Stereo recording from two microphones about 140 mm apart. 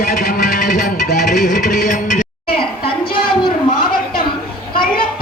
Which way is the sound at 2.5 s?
40° left (ahead or behind).